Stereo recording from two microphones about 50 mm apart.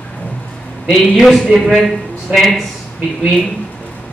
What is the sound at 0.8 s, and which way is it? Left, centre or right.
A man's voice, centre.